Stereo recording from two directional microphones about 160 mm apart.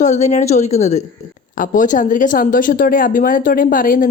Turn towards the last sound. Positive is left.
turn(degrees=60)  # may be behind; listen again after turning